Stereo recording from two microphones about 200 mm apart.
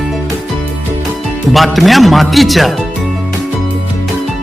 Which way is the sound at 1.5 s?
Centre (ahead or behind).